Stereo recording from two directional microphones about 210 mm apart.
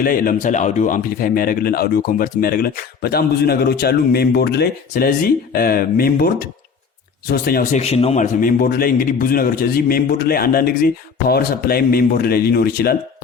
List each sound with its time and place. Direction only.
0.0 s speech: 40° left (ahead or behind)
7.8 s speech: 30° left (ahead or behind); by 13.0 s 45° left (ahead or behind)